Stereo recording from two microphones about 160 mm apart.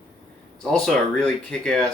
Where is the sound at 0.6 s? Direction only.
5° left (ahead or behind).